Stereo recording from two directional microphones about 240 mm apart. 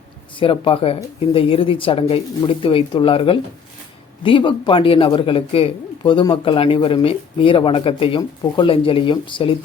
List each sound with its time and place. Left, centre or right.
0.3 s a man's voice: left